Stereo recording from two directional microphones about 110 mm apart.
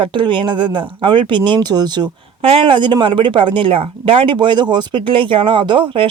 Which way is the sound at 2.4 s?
55° right (ahead or behind).